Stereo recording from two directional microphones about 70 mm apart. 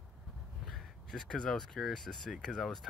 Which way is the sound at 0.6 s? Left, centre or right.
Centre.